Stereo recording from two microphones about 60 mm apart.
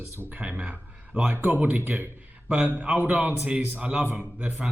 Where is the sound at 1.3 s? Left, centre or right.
Right.